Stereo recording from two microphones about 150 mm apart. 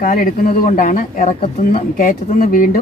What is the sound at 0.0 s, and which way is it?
Speech, 60° left (ahead or behind).